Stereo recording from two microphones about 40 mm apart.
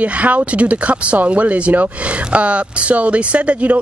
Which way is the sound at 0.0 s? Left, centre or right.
Right.